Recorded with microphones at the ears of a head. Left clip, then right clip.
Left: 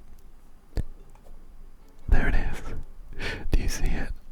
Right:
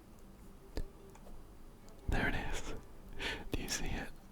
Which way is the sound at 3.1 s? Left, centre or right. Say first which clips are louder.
Left 7 dB; left.